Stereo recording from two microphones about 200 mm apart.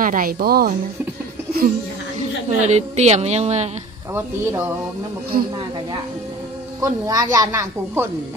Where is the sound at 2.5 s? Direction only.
35° right (ahead or behind).